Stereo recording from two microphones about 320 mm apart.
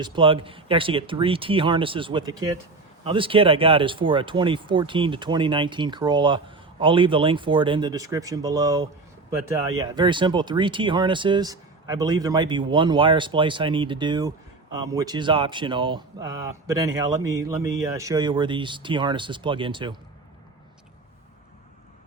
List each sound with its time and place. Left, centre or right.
0.0 s speech: centre